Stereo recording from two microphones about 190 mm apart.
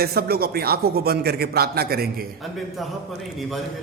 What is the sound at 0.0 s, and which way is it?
A man's voice, 55° right (ahead or behind).